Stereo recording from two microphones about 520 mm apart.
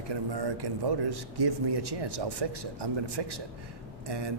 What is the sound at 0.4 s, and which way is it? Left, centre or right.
Speech, right.